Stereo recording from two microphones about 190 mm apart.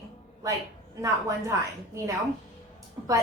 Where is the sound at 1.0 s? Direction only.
15° right (ahead or behind).